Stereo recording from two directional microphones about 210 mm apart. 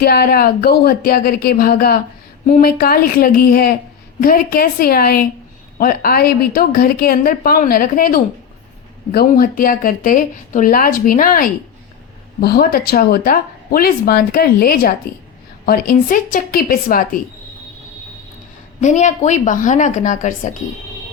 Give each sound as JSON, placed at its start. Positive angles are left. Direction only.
{"t": 0.0, "sound": "speech", "side_deg": 50}
{"t": 18.8, "sound": "speech", "side_deg": 35}